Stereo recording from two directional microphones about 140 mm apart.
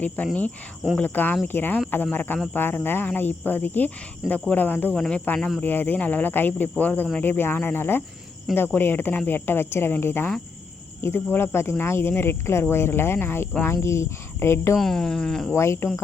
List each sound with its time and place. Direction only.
0.2 s speech: 10° left (ahead or behind)
14.8 s speech: 5° left (ahead or behind)
15.5 s speech: 20° left (ahead or behind)